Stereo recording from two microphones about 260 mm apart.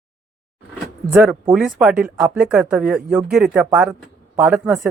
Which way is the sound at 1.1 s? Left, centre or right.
Centre.